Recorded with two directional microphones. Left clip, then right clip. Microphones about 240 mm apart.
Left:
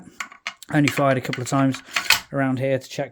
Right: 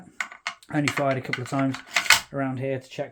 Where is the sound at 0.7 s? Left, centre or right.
Left.